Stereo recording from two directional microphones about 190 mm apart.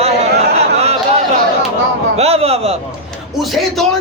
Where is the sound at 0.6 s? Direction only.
35° right (ahead or behind).